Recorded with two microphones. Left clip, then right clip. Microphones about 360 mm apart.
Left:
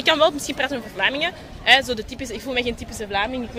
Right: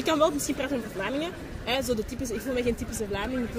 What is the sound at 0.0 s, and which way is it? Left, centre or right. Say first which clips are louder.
Speech: left 6 dB; left.